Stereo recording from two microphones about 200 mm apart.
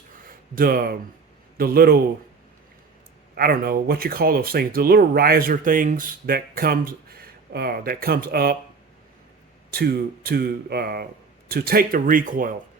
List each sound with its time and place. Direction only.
0.3 s speech: 45° right (ahead or behind)
3.3 s speech: 50° right (ahead or behind)
9.7 s speech: 50° right (ahead or behind)